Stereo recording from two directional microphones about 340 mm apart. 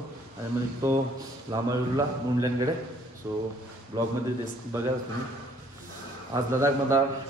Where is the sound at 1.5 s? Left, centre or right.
Centre.